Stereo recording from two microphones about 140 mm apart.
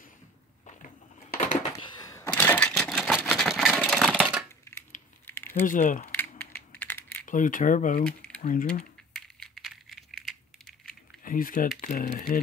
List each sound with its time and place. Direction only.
1.4 s a sound: 55° left (ahead or behind)
1.8 s a sound: 30° left (ahead or behind); by 2.7 s 15° left (ahead or behind)
2.7 s vehicle: centre (ahead or behind)
3.3 s a sound: centre (ahead or behind)
4.7 s a sound: 20° left (ahead or behind)
5.2 s typing: 15° left (ahead or behind)
5.7 s speech: 65° left (ahead or behind)
6.1 s coin: 15° left (ahead or behind)
7.2 s speech: 70° left (ahead or behind)
9.1 s coin: centre (ahead or behind)
11.2 s speech: 80° left
11.8 s speech: 70° left (ahead or behind)